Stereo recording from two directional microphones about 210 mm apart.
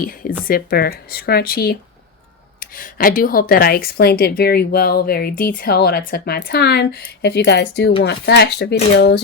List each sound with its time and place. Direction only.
0.0 s a woman's voice: 45° left (ahead or behind)